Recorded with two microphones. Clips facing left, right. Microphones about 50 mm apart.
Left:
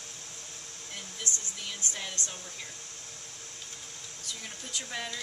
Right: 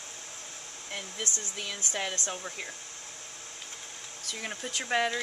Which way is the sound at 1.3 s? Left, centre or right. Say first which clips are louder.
Even; left.